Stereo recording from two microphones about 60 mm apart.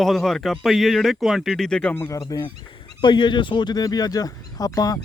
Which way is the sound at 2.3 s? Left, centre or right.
Left.